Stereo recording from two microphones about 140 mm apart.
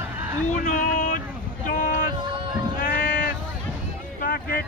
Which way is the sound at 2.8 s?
80° left.